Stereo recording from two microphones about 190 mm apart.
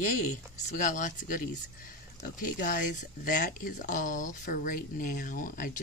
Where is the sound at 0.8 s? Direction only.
40° left (ahead or behind).